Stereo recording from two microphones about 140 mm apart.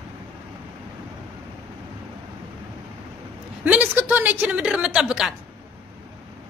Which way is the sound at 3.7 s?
15° right (ahead or behind).